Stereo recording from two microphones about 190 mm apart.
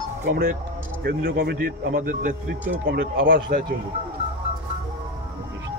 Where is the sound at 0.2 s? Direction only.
55° right (ahead or behind).